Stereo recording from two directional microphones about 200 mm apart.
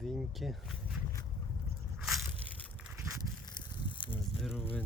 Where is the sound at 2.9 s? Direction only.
15° right (ahead or behind).